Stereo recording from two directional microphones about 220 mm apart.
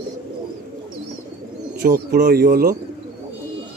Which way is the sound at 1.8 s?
40° right (ahead or behind).